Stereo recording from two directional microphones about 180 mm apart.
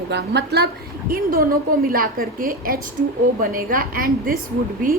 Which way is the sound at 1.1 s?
55° right (ahead or behind).